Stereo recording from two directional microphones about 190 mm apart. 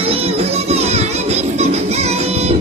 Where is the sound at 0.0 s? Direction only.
30° right (ahead or behind).